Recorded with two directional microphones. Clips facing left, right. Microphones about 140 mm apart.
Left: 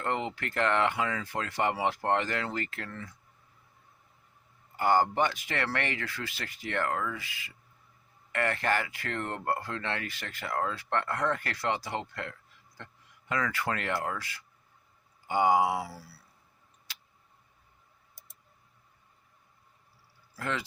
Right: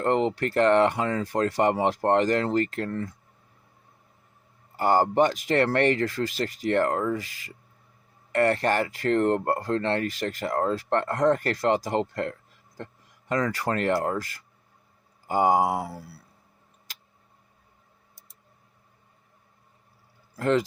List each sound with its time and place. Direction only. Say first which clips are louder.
0.0 s speech: right 9 dB; 40° right (ahead or behind)
4.8 s speech: right 5 dB; 35° right (ahead or behind); by 16.2 s 55° right (ahead or behind)
20.3 s speech: right 11 dB; 40° right (ahead or behind)